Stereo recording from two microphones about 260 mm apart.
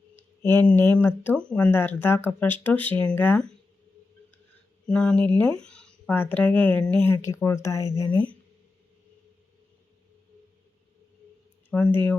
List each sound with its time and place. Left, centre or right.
0.2 s speech: centre
4.9 s speech: centre
11.7 s speech: centre